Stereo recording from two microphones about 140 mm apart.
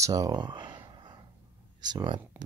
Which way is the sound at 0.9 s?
35° right (ahead or behind).